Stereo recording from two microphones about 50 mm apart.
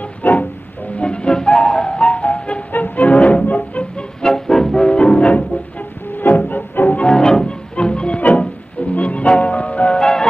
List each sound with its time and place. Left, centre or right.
0.2 s music: left
0.9 s music: left
2.7 s music: left
4.2 s music: centre
6.2 s music: left
7.0 s music: centre
9.9 s music: centre